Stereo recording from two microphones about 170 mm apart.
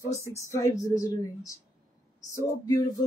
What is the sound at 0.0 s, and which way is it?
Speech, 15° left (ahead or behind).